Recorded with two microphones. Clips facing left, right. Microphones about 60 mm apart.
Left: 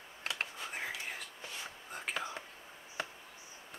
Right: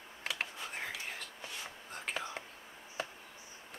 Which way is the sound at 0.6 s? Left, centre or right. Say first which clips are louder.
Left 1 dB; centre.